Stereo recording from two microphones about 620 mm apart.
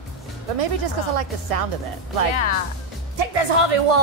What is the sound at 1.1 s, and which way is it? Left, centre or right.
Speech, right.